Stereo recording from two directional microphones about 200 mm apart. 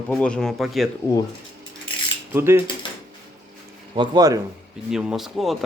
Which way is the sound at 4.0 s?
20° right (ahead or behind).